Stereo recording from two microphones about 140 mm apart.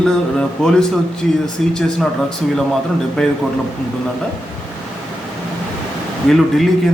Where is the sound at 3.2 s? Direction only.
5° left (ahead or behind).